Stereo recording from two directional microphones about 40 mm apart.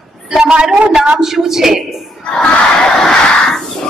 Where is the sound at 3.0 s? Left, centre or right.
Centre.